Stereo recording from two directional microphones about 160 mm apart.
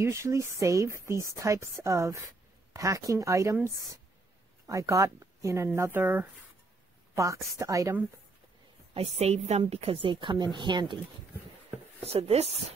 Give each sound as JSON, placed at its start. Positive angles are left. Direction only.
{"t": 0.0, "sound": "speech", "side_deg": -20}
{"t": 8.9, "sound": "a woman's voice", "side_deg": -40}
{"t": 12.0, "sound": "a woman's voice", "side_deg": -40}